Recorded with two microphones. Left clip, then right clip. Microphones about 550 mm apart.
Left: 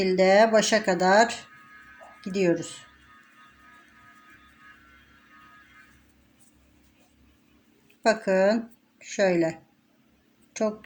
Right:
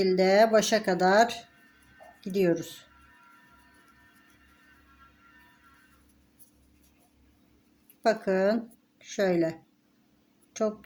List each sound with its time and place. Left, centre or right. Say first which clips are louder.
0.0 s speech: left 3 dB; right
8.0 s a woman's voice: left 3 dB; right